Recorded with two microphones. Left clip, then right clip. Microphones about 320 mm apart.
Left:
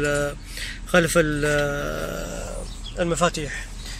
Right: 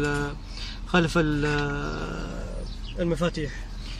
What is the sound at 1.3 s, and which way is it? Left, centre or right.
Speech, left.